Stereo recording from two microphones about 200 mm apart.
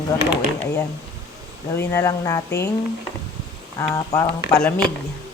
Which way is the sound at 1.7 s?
15° left (ahead or behind).